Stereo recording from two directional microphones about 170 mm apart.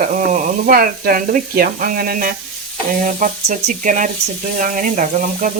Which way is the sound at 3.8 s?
50° right (ahead or behind).